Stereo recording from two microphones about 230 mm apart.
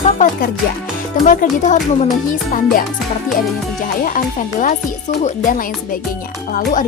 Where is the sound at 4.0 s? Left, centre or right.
Left.